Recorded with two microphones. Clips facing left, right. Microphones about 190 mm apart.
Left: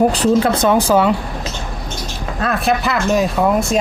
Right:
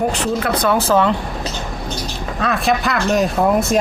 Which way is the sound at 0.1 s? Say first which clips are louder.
Left 5 dB; 30° left (ahead or behind).